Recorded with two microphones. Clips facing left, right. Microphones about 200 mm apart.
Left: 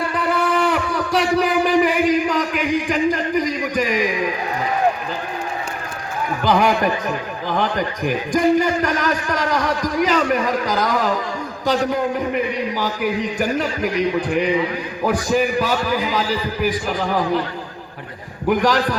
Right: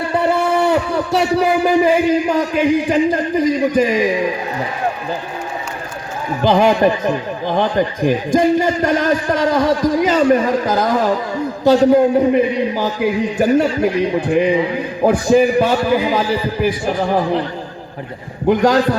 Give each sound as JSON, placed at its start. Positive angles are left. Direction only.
{"t": 0.1, "sound": "a sound", "side_deg": -25}
{"t": 2.4, "sound": "a man's voice", "side_deg": -25}
{"t": 6.4, "sound": "a man's voice", "side_deg": -25}
{"t": 18.4, "sound": "a man's voice", "side_deg": -25}